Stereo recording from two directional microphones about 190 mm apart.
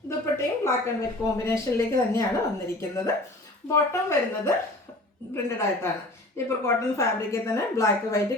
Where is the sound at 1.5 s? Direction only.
15° left (ahead or behind).